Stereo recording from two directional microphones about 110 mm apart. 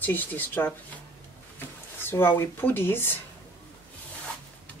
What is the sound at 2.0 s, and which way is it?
Speech, 20° left (ahead or behind).